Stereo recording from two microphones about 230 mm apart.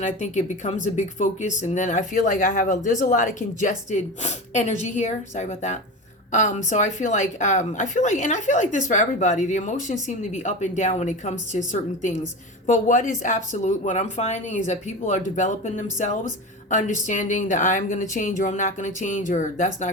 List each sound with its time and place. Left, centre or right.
0.0 s a woman's voice: left